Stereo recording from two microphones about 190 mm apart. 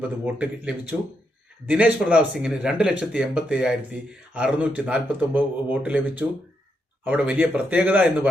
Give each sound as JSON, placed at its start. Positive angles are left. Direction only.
{"t": 0.0, "sound": "a man's voice", "side_deg": -10}